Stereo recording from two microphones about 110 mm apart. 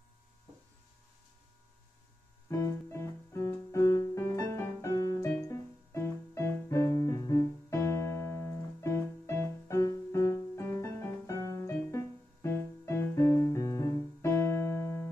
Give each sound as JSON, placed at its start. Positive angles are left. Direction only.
{"t": 2.5, "sound": "music", "side_deg": 25}